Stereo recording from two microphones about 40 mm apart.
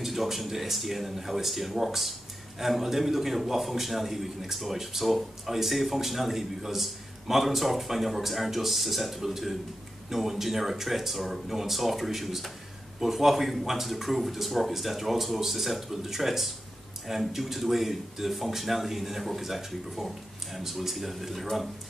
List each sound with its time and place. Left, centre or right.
0.0 s a man's voice: centre